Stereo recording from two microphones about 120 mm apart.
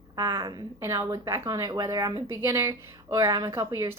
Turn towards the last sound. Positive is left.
turn(degrees=-25)  # may be behind; listen again after turning